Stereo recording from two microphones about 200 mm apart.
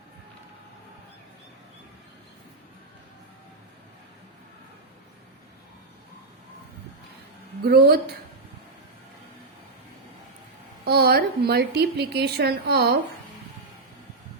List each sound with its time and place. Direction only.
7.6 s a woman's voice: 50° right (ahead or behind)
10.8 s a woman's voice: 50° right (ahead or behind)